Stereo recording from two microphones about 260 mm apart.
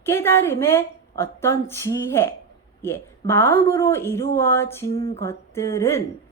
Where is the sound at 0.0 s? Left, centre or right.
Centre.